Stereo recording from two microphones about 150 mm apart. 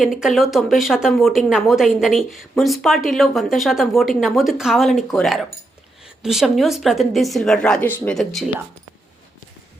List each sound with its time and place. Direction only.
0.0 s speech: centre (ahead or behind)